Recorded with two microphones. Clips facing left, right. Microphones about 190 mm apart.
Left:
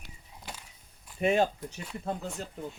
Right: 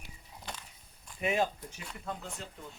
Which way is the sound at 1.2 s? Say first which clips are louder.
Left 5 dB; 35° left (ahead or behind).